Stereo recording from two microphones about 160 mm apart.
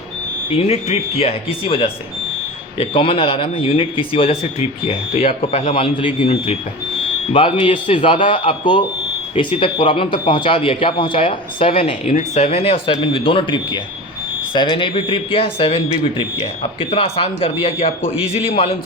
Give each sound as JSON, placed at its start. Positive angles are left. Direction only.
{"t": 0.5, "sound": "speech", "side_deg": 40}